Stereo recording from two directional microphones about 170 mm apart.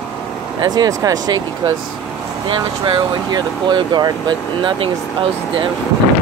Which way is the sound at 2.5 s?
25° right (ahead or behind).